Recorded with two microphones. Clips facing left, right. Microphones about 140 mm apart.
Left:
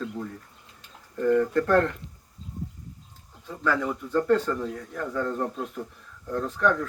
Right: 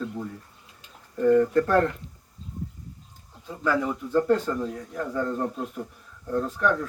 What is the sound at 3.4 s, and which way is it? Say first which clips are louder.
Speech: right 1 dB; 10° right (ahead or behind).